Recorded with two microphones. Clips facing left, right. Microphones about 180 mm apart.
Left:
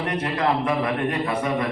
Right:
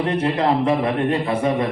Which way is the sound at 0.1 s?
30° right (ahead or behind).